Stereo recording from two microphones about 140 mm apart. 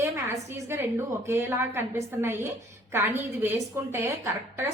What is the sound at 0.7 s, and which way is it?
A woman's voice, 15° right (ahead or behind).